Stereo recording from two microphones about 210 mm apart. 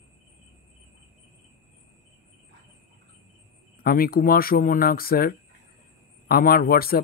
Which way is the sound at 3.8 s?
45° left (ahead or behind).